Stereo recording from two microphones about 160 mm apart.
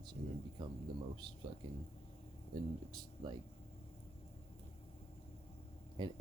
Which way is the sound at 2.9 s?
25° right (ahead or behind).